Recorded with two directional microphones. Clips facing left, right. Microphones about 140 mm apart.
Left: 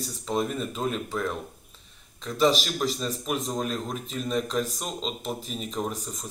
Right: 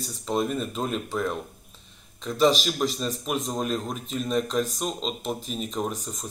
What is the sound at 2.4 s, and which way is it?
A man's voice, centre (ahead or behind).